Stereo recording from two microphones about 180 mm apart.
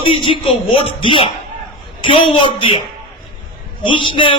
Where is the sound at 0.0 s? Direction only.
30° left (ahead or behind).